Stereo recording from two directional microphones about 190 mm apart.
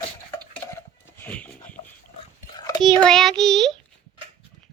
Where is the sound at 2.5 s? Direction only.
20° left (ahead or behind).